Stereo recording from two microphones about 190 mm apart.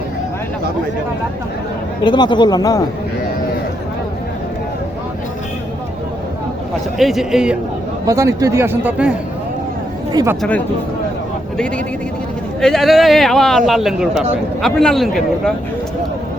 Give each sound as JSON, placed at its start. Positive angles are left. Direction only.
{"t": 2.0, "sound": "speech", "side_deg": 25}
{"t": 7.0, "sound": "a man's voice", "side_deg": 0}
{"t": 8.0, "sound": "speech", "side_deg": -15}
{"t": 10.1, "sound": "speech", "side_deg": -20}
{"t": 12.6, "sound": "a man's voice", "side_deg": 0}